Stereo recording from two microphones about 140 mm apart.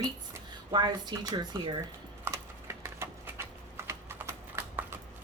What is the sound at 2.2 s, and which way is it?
Typing, 20° right (ahead or behind).